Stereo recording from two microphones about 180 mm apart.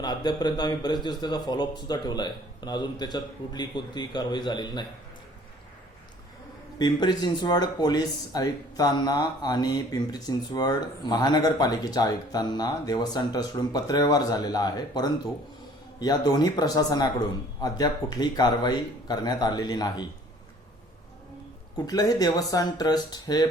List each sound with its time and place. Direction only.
0.0 s speech: 20° left (ahead or behind)
6.7 s speech: 25° left (ahead or behind)
21.8 s speech: 20° left (ahead or behind)